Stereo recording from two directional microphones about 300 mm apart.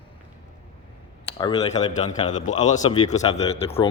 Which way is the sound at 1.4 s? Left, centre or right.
Centre.